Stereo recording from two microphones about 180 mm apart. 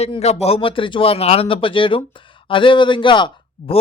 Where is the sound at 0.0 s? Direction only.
35° left (ahead or behind).